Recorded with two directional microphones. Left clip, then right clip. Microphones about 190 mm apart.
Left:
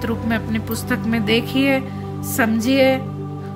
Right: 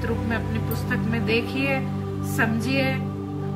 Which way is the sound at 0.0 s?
55° left (ahead or behind).